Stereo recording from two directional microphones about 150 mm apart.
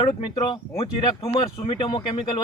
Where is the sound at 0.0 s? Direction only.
30° left (ahead or behind).